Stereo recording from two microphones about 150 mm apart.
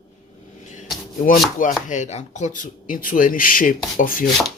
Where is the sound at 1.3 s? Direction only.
60° left (ahead or behind).